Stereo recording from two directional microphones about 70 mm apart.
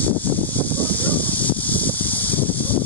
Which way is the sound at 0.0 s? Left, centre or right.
Left.